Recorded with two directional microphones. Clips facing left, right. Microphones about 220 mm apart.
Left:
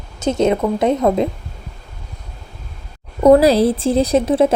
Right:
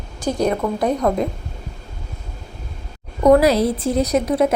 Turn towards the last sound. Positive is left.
turn(degrees=30)  # may be behind; listen again after turning